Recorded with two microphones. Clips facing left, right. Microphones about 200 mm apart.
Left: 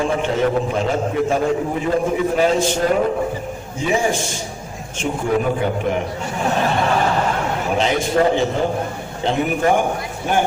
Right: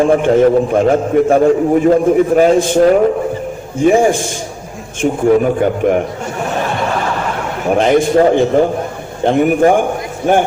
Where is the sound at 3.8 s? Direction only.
55° right (ahead or behind).